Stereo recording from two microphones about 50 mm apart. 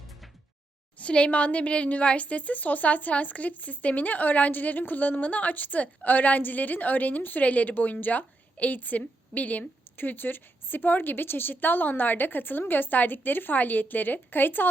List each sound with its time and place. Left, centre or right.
0.9 s a woman's voice: left